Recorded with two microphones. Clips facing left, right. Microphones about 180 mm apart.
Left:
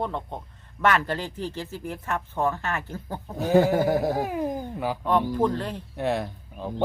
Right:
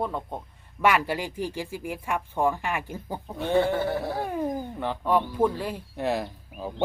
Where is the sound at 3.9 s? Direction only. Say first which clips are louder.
Left 5 dB; 40° left (ahead or behind).